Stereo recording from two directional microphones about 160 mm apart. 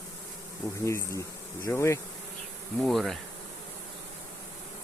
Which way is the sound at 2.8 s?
Centre (ahead or behind).